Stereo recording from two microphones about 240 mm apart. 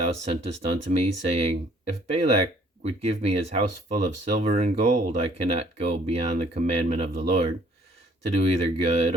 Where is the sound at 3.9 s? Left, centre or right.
Right.